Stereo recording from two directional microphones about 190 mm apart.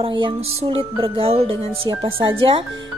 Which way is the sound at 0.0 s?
30° right (ahead or behind).